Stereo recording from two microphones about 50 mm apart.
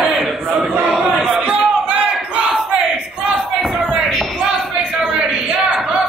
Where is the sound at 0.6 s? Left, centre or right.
Right.